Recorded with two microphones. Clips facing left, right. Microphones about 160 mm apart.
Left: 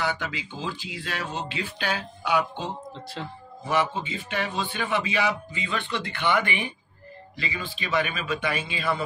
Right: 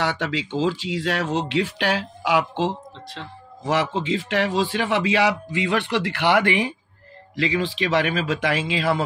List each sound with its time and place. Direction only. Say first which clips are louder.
0.0 s a man's voice: right 5 dB; 85° right
3.2 s a man's voice: left 2 dB; 5° left (ahead or behind)
3.6 s a man's voice: right 4 dB; 90° right